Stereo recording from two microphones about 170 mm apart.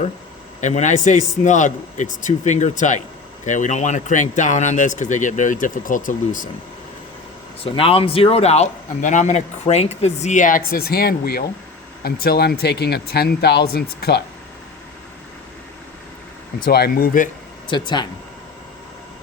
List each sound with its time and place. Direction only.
0.6 s a man's voice: 45° left (ahead or behind)
7.6 s a man's voice: 35° left (ahead or behind); by 14.3 s 70° left (ahead or behind)
16.6 s speech: 65° left (ahead or behind)
17.7 s speech: 25° left (ahead or behind)